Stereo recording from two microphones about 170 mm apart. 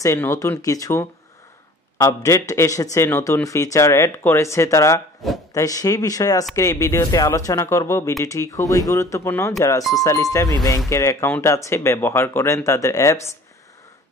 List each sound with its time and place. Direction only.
0.0 s a man's voice: 15° left (ahead or behind)